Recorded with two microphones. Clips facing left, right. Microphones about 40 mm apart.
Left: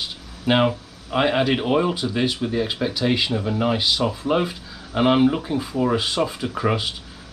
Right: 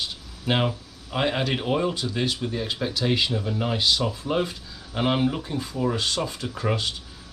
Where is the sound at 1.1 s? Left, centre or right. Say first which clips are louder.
Left 5 dB; centre.